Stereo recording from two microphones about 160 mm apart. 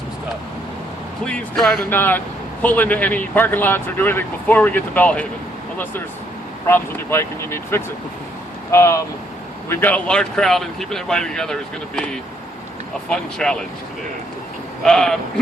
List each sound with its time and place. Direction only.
1.2 s speech: 5° left (ahead or behind)
14.8 s speech: 5° left (ahead or behind)